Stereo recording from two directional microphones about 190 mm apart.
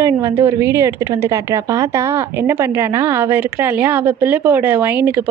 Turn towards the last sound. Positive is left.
turn(degrees=-10)  # may be behind; listen again after turning